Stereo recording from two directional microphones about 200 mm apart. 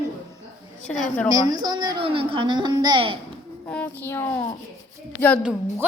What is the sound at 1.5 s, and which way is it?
A woman's voice, 20° right (ahead or behind).